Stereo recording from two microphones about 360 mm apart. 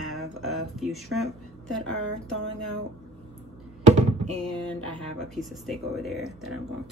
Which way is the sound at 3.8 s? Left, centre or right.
Centre.